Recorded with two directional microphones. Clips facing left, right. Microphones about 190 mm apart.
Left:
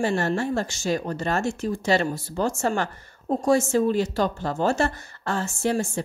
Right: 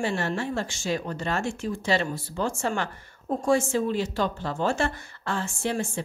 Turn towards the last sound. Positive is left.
turn(degrees=40)  # may be behind; listen again after turning